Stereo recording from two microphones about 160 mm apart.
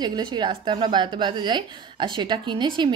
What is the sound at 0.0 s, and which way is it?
A woman's voice, 25° right (ahead or behind).